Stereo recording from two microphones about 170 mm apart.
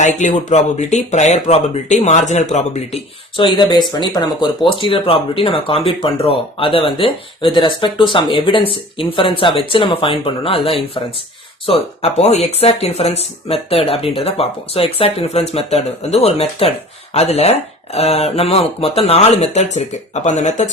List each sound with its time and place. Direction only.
0.0 s speech: 45° left (ahead or behind)